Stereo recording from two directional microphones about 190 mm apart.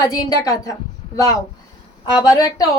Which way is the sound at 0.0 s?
20° left (ahead or behind).